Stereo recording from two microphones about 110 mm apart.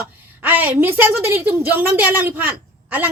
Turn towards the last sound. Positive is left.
turn(degrees=-15)  # may be behind; listen again after turning